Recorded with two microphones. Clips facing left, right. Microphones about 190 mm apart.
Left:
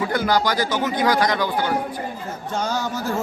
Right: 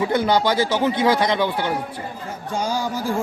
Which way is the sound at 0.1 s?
25° right (ahead or behind).